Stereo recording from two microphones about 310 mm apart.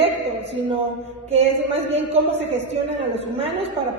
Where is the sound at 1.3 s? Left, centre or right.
Centre.